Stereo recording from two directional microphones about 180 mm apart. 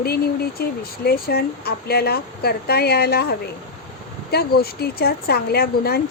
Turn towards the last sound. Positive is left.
turn(degrees=60)  # may be behind; listen again after turning